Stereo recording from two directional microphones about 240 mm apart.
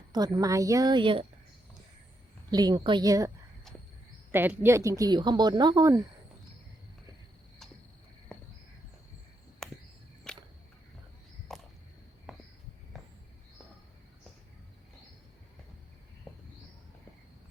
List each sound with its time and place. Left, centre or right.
0.1 s speech: centre
2.5 s speech: centre
3.7 s cricket: centre
4.3 s speech: centre
9.6 s cricket: centre
11.5 s a sound: centre